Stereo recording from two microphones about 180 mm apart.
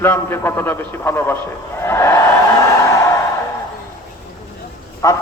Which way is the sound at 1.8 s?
15° left (ahead or behind).